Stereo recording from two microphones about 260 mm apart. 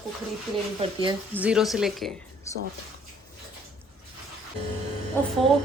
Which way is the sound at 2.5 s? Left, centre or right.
Centre.